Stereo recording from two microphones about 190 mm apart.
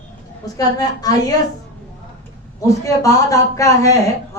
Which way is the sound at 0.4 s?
20° left (ahead or behind).